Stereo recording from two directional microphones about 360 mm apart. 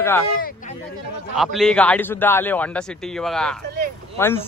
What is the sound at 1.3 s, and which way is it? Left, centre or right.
A man's voice, centre.